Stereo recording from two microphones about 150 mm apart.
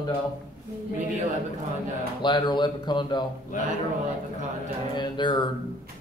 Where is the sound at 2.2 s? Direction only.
30° left (ahead or behind).